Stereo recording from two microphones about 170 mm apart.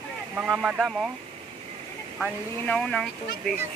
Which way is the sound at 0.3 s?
10° right (ahead or behind).